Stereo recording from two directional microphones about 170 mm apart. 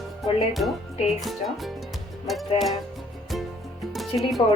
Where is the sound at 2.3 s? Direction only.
Centre (ahead or behind).